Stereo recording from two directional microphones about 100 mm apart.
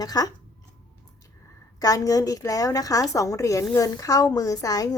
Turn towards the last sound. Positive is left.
turn(degrees=35)  # may be behind; listen again after turning